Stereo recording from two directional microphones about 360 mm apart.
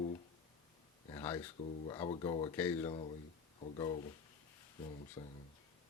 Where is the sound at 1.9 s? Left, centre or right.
Centre.